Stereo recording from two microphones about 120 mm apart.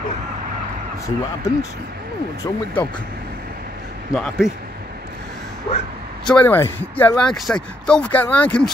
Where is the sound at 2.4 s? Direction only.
30° left (ahead or behind).